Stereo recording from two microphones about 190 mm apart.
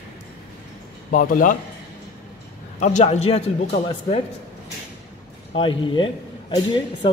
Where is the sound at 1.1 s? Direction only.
45° left (ahead or behind).